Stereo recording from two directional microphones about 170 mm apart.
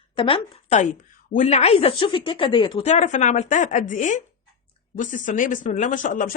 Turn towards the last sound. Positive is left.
turn(degrees=50)  # may be behind; listen again after turning